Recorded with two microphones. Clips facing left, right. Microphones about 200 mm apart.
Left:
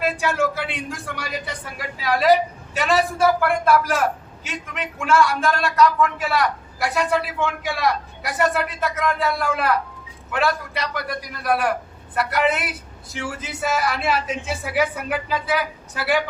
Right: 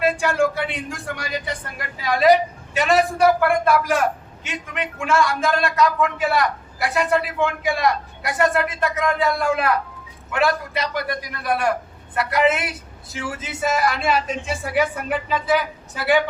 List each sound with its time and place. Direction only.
0.0 s a man's voice: centre (ahead or behind)